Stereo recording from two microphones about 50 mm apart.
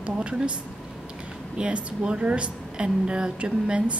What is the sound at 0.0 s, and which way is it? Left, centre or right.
Speech, right.